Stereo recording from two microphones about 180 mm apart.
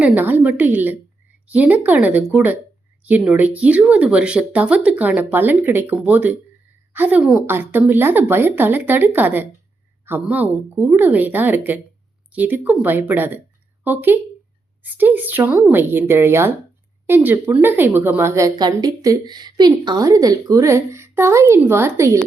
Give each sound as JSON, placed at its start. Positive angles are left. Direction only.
{"t": 0.0, "sound": "a woman's voice", "side_deg": -10}